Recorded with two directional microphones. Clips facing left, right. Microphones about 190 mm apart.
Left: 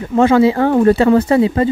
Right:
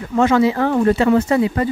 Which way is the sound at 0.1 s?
30° left (ahead or behind).